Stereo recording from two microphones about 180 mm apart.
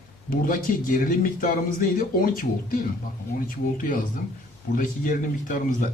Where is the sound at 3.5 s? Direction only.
50° left (ahead or behind).